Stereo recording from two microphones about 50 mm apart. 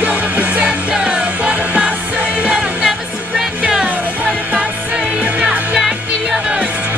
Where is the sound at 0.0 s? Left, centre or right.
Right.